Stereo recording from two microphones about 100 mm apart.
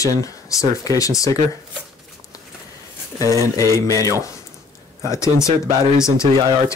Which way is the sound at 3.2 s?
35° left (ahead or behind).